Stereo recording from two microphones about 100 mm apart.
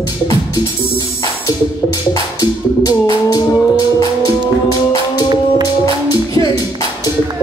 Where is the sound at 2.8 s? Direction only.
40° left (ahead or behind).